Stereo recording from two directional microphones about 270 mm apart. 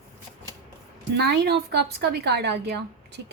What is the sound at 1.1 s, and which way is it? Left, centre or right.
A woman's voice, right.